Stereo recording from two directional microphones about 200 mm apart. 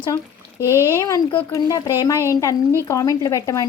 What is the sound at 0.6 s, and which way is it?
Speech, 10° right (ahead or behind).